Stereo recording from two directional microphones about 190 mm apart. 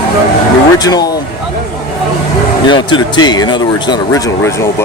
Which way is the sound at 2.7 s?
25° left (ahead or behind).